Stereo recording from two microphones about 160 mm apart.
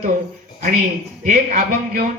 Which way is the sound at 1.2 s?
60° right (ahead or behind).